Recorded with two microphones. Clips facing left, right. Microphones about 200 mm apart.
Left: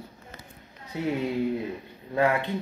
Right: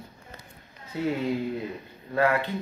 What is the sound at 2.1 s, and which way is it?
Speech, 15° left (ahead or behind).